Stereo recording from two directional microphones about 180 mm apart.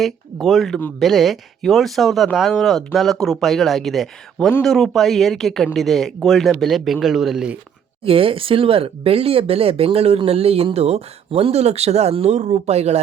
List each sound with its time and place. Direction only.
0.0 s speech: centre (ahead or behind)
8.0 s speech: 30° right (ahead or behind)